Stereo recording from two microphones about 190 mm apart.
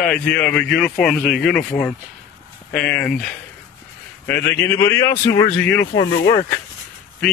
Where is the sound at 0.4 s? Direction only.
5° left (ahead or behind).